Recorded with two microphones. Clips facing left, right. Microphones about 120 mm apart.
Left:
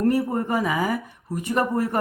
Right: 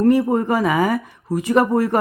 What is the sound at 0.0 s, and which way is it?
Speech, 90° right.